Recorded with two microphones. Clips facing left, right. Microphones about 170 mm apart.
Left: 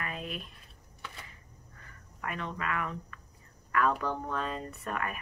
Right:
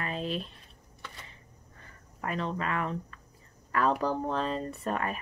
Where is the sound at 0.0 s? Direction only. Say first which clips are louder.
Right 5 dB; 30° right (ahead or behind).